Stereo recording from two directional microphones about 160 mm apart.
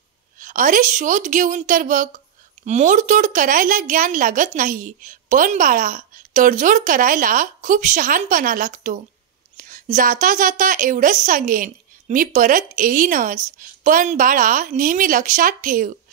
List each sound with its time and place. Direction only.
0.4 s a woman's voice: 55° right (ahead or behind)